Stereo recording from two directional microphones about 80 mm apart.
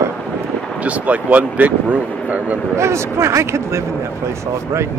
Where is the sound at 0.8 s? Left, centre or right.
Centre.